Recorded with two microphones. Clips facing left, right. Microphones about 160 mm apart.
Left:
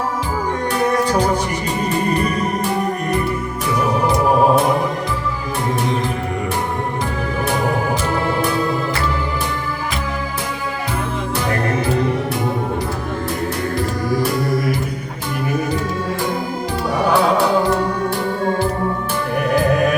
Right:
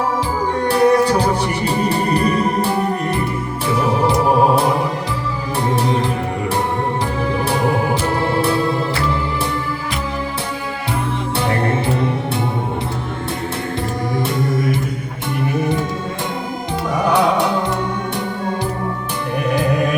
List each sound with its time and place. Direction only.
0.7 s music: 30° right (ahead or behind)
8.2 s music: 30° right (ahead or behind)
14.2 s music: 25° right (ahead or behind)
17.1 s music: 20° right (ahead or behind)